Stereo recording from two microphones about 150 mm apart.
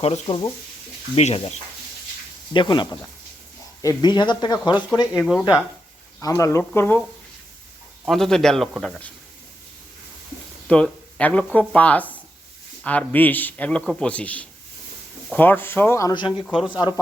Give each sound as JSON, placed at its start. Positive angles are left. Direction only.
{"t": 0.0, "sound": "speech", "side_deg": 45}
{"t": 2.5, "sound": "speech", "side_deg": 30}
{"t": 5.1, "sound": "a man's voice", "side_deg": 0}
{"t": 6.1, "sound": "a man's voice", "side_deg": 20}
{"t": 8.0, "sound": "a man's voice", "side_deg": 0}
{"t": 10.7, "sound": "a man's voice", "side_deg": 10}